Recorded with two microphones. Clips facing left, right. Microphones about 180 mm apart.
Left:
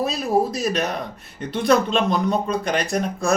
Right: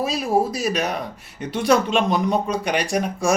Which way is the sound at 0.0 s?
10° right (ahead or behind).